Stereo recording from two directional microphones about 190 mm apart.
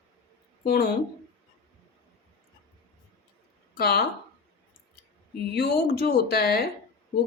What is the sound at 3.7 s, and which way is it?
Speech, 55° left (ahead or behind).